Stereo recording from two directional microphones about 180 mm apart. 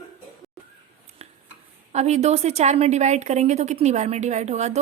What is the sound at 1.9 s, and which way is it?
A woman's voice, 40° right (ahead or behind).